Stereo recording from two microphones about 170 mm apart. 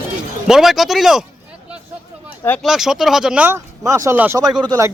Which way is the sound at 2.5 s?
5° left (ahead or behind).